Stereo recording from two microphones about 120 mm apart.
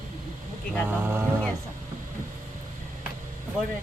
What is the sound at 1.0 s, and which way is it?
Speech, 20° right (ahead or behind).